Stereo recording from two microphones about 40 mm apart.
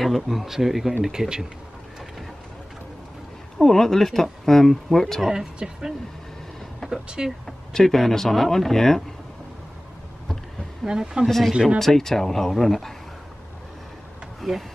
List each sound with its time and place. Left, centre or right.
0.0 s speech: centre
3.5 s speech: centre
5.6 s speech: centre
6.8 s a sound: centre
7.2 s speech: centre
10.9 s speech: right
11.2 s speech: centre
14.4 s speech: centre